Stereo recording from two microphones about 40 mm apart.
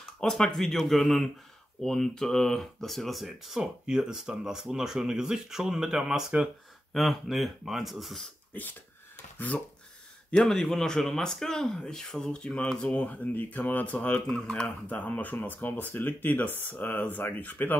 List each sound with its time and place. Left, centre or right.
0.2 s speech: centre
3.8 s speech: centre
6.9 s speech: centre
8.5 s speech: left
10.4 s speech: centre; by 13.9 s left
14.2 s speech: left
14.9 s speech: left
15.4 s speech: left
16.1 s speech: left
16.7 s speech: left